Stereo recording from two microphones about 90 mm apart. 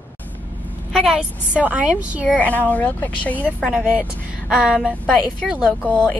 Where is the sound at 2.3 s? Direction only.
15° left (ahead or behind).